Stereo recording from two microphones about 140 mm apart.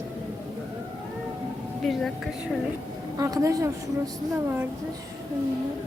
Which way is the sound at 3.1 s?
25° right (ahead or behind).